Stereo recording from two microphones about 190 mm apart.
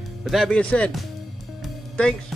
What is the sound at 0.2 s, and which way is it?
Speech, centre (ahead or behind).